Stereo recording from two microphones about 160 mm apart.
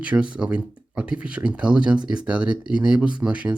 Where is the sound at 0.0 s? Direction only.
10° right (ahead or behind).